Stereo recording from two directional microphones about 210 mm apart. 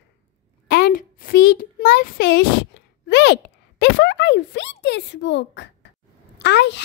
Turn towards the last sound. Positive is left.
turn(degrees=55)  # may be behind; listen again after turning